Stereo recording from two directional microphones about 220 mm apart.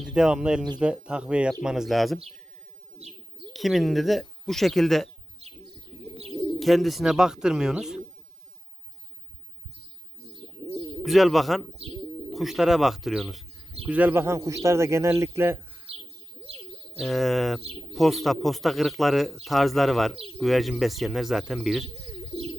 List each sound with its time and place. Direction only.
0.0 s speech: 5° right (ahead or behind)
3.0 s bird: 25° right (ahead or behind)
3.5 s speech: centre (ahead or behind)
6.6 s speech: centre (ahead or behind)
11.0 s speech: centre (ahead or behind)
17.0 s speech: centre (ahead or behind)